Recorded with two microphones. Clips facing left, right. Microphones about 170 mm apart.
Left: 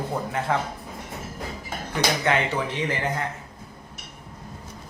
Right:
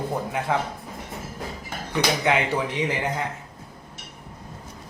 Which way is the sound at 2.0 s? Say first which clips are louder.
Right 1 dB; 15° right (ahead or behind).